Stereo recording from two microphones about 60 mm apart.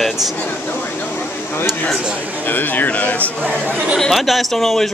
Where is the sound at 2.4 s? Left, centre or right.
Left.